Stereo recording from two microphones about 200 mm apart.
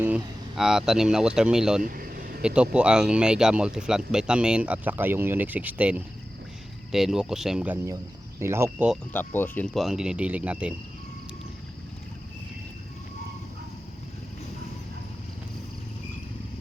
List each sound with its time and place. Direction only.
0.0 s speech: 5° right (ahead or behind)
1.8 s vehicle: 45° right (ahead or behind)
2.4 s speech: 5° right (ahead or behind)
9.1 s speech: 10° left (ahead or behind); by 10.8 s 5° right (ahead or behind)